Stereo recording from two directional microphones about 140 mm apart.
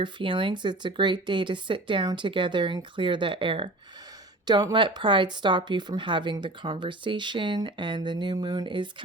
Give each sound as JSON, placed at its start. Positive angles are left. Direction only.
{"t": 0.0, "sound": "speech", "side_deg": -35}